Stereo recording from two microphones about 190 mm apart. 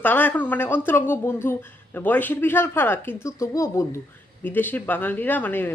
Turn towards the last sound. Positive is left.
turn(degrees=10)  # may be behind; listen again after turning